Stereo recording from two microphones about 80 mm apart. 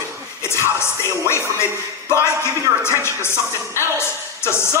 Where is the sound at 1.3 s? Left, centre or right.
Left.